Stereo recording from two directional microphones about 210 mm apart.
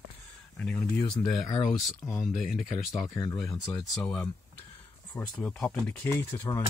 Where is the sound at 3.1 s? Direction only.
15° left (ahead or behind).